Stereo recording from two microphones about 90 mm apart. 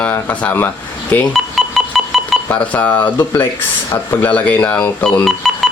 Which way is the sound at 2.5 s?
15° left (ahead or behind).